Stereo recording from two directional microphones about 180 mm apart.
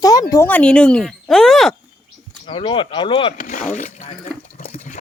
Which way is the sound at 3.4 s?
45° left (ahead or behind).